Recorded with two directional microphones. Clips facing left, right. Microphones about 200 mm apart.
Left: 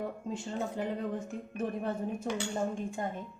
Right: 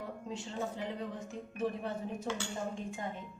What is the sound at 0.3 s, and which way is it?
Speech, 50° left (ahead or behind).